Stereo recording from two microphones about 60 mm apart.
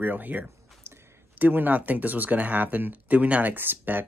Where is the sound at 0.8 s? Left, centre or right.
Right.